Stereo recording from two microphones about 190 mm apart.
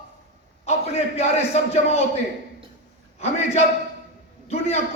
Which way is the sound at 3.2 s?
35° left (ahead or behind).